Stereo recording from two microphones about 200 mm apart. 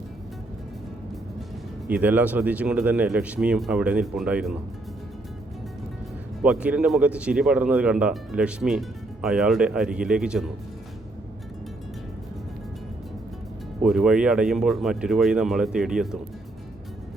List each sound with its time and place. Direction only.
1.9 s speech: 10° right (ahead or behind)
6.4 s speech: 5° right (ahead or behind)
13.8 s speech: centre (ahead or behind)